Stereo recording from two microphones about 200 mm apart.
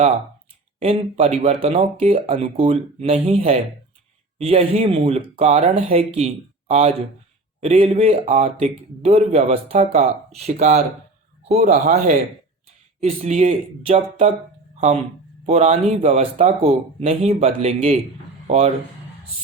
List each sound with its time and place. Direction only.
0.8 s speech: 30° right (ahead or behind)
15.4 s speech: 35° right (ahead or behind)